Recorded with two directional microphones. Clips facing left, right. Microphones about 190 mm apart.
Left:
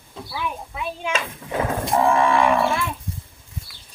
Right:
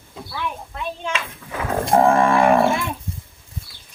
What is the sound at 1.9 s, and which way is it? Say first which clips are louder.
Roaring cats: right 3 dB; 45° right (ahead or behind).